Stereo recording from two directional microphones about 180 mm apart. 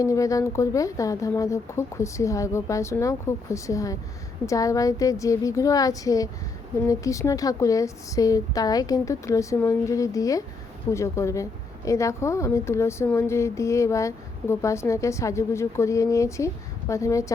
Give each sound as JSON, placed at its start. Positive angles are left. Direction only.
{"t": 0.0, "sound": "a woman's voice", "side_deg": 20}